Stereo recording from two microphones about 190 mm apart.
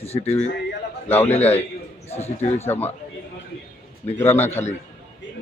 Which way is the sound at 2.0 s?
35° left (ahead or behind).